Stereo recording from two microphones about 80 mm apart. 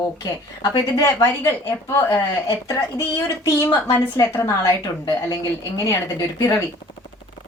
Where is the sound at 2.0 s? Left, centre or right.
Left.